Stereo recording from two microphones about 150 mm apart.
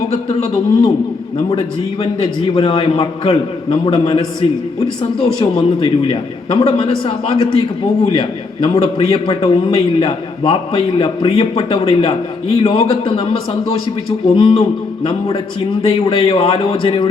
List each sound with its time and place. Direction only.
0.1 s a man's voice: 40° left (ahead or behind)
16.0 s a man's voice: 35° left (ahead or behind)